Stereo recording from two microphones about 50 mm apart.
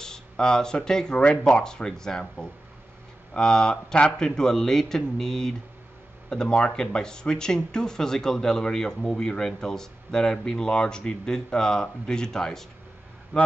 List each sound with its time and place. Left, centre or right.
0.0 s speech: centre